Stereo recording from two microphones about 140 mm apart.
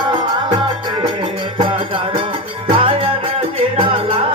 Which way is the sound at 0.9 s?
35° right (ahead or behind).